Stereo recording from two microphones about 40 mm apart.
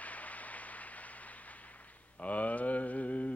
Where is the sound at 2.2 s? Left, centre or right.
Left.